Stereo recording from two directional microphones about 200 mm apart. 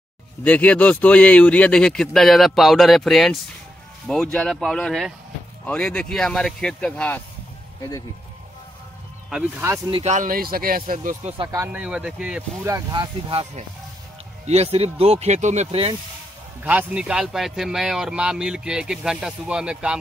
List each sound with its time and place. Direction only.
0.4 s speech: 5° left (ahead or behind)
9.3 s speech: 10° right (ahead or behind)
9.8 s speech: 30° right (ahead or behind)
11.3 s speech: 15° right (ahead or behind)
16.6 s speech: 5° right (ahead or behind)